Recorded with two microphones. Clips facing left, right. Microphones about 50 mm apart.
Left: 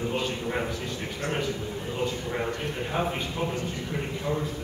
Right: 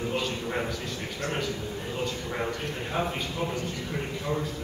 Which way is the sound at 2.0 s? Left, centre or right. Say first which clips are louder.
Left 3 dB; centre.